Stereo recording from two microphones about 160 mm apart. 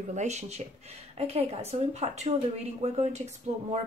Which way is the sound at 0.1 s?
45° right (ahead or behind).